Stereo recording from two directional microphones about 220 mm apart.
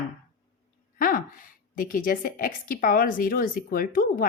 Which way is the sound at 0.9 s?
40° left (ahead or behind).